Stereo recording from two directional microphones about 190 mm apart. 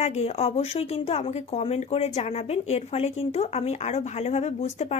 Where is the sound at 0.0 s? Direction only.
35° left (ahead or behind).